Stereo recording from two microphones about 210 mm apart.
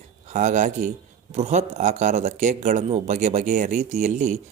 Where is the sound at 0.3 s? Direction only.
35° right (ahead or behind).